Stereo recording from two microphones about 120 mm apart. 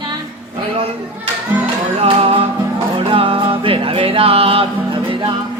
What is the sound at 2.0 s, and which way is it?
Music, 50° right (ahead or behind).